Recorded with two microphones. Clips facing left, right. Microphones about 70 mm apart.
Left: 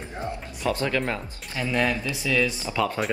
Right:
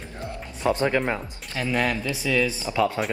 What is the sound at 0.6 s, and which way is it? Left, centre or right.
Speech, right.